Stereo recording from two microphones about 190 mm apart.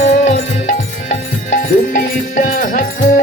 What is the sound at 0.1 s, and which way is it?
Music, 35° left (ahead or behind).